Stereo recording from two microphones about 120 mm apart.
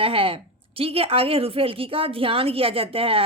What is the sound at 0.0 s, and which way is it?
A woman's voice, 50° right (ahead or behind).